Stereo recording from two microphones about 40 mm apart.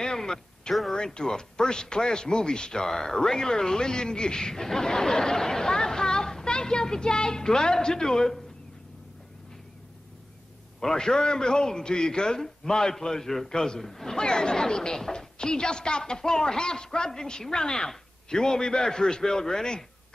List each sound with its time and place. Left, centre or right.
0.0 s a sound: centre
0.9 s speech: centre
10.8 s speech: centre
14.1 s speech: centre